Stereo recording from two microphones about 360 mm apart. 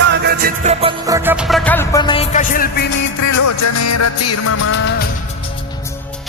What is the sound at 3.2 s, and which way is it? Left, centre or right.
Music, left.